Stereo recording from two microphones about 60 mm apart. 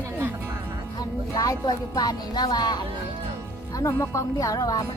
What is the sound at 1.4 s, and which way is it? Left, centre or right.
Speech, left.